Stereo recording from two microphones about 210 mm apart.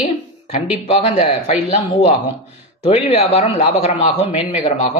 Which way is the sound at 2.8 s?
30° left (ahead or behind).